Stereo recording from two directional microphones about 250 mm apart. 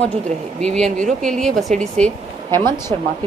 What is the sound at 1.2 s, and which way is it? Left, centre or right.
A woman's voice, centre.